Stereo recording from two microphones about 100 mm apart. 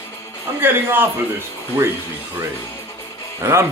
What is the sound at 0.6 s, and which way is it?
Speech, 20° right (ahead or behind).